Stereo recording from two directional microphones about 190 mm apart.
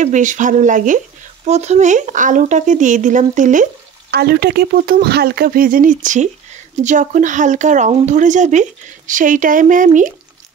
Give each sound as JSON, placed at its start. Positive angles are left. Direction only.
{"t": 0.0, "sound": "speech", "side_deg": -40}
{"t": 4.1, "sound": "speech", "side_deg": -55}